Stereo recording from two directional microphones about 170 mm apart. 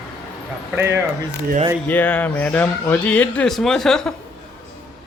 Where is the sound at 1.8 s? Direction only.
10° left (ahead or behind).